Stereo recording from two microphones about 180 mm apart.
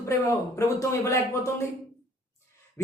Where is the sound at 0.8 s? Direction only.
15° left (ahead or behind).